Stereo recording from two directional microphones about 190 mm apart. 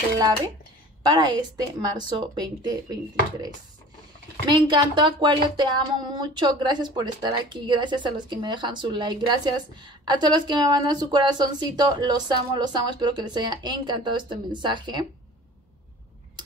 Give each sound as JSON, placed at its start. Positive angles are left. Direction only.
{"t": 1.0, "sound": "speech", "side_deg": -20}